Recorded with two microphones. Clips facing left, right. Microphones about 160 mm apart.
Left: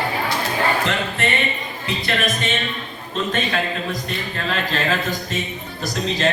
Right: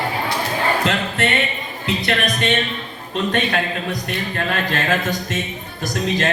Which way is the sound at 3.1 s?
60° right (ahead or behind).